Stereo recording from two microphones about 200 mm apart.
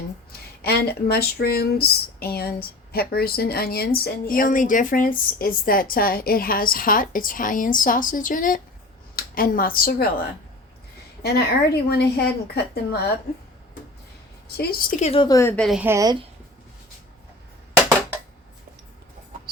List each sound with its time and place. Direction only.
0.6 s speech: 50° left (ahead or behind)
11.2 s speech: 55° left (ahead or behind)
14.4 s a woman's voice: 50° left (ahead or behind); by 15.6 s 15° left (ahead or behind)
15.6 s speech: centre (ahead or behind)
15.9 s a woman's voice: 15° right (ahead or behind)